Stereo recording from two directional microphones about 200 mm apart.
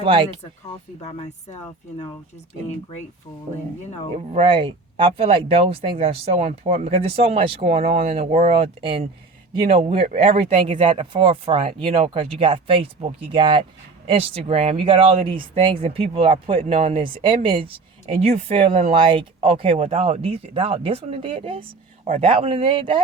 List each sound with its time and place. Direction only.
0.0 s speech: 25° right (ahead or behind)
1.0 s speech: 35° left (ahead or behind)
4.2 s speech: 30° right (ahead or behind)